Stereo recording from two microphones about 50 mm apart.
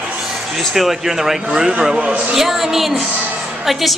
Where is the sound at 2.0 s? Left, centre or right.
Right.